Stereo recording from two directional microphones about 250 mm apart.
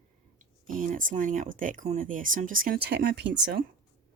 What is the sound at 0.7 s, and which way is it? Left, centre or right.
Speech, right.